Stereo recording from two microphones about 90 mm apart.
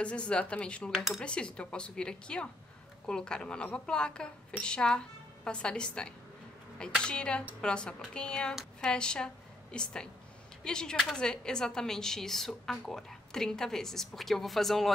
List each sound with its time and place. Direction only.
0.0 s a woman's voice: 10° left (ahead or behind)
0.9 s speech: 5° right (ahead or behind)
1.2 s a woman's voice: 10° left (ahead or behind)